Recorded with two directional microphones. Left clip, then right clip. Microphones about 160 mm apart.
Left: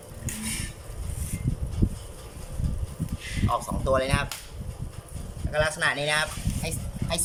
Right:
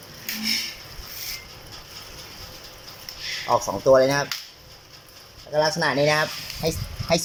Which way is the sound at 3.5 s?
40° right (ahead or behind).